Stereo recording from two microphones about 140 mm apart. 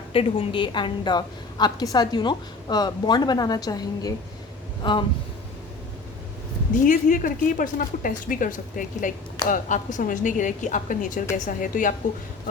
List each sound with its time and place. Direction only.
0.1 s a woman's voice: 40° left (ahead or behind)
6.8 s a woman's voice: 70° left (ahead or behind)